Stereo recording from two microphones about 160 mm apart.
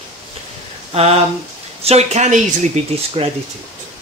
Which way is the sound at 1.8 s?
40° right (ahead or behind).